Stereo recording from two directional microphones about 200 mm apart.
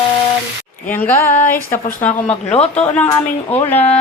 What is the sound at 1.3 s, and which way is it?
Speech, 35° left (ahead or behind).